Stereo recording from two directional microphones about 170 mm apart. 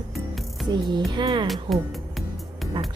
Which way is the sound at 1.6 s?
Centre (ahead or behind).